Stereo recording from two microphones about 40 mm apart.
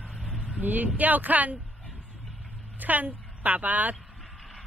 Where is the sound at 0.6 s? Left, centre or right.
Right.